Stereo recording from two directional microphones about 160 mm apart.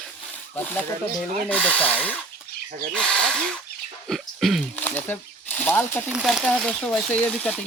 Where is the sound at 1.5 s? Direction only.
10° left (ahead or behind).